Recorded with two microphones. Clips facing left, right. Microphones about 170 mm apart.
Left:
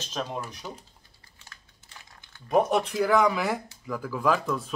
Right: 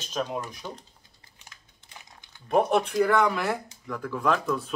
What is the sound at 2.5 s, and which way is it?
Speech, centre (ahead or behind).